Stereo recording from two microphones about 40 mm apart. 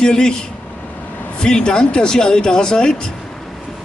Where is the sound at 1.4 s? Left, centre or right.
Centre.